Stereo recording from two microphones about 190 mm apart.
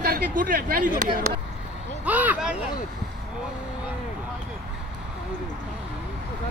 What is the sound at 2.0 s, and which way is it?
Speech, 10° right (ahead or behind).